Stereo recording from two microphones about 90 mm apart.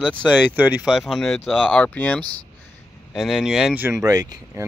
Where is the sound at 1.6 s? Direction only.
15° left (ahead or behind).